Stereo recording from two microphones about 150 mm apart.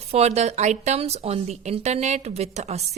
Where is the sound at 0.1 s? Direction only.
45° right (ahead or behind).